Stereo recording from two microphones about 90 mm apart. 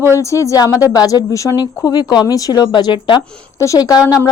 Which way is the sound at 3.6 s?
40° left (ahead or behind).